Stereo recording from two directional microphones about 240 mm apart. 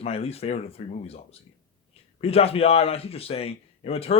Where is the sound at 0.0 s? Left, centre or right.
Left.